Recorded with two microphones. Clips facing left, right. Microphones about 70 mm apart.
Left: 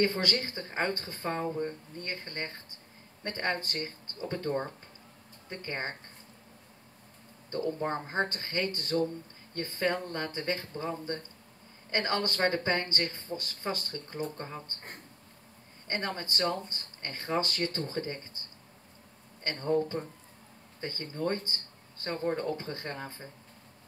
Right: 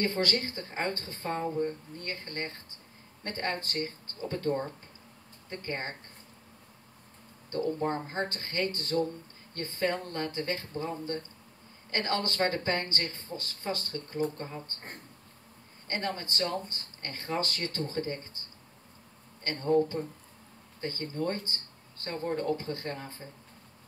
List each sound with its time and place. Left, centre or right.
0.0 s speech: left
7.5 s speech: left
15.9 s speech: left
19.4 s speech: left
20.8 s speech: left